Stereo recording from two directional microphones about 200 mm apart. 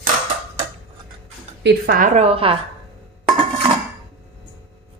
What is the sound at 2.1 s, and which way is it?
Speech, 30° right (ahead or behind).